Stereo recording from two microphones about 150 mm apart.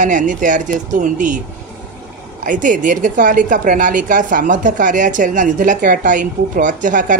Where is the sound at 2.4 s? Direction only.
60° right (ahead or behind).